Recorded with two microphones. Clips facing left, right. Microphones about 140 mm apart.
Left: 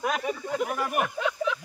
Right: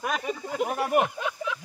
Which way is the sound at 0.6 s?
35° right (ahead or behind).